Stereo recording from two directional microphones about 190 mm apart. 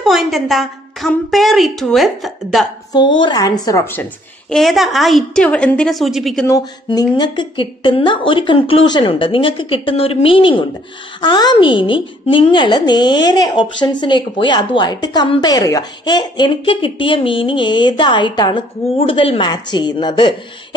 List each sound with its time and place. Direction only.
0.0 s a woman's voice: centre (ahead or behind)
2.9 s a woman's voice: 25° left (ahead or behind); by 6.4 s centre (ahead or behind)
6.4 s a woman's voice: 20° left (ahead or behind)